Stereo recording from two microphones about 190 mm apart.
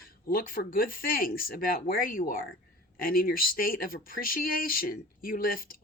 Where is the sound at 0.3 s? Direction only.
50° left (ahead or behind).